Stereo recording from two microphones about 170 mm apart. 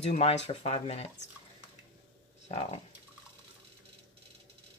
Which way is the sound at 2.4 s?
35° left (ahead or behind).